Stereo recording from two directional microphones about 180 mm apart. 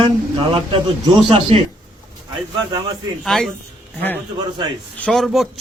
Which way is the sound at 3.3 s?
Centre (ahead or behind).